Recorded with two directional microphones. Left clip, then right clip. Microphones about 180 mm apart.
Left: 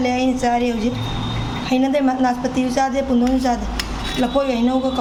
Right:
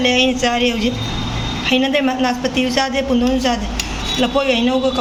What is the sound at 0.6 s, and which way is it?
Speech, 60° right (ahead or behind).